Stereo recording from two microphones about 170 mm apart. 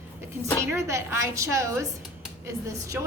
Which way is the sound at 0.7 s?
15° right (ahead or behind).